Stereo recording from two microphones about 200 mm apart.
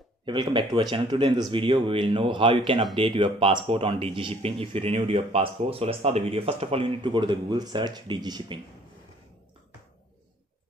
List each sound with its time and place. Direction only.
0.2 s a man's voice: 25° right (ahead or behind)